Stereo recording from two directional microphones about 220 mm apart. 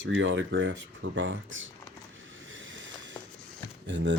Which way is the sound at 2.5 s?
60° right (ahead or behind).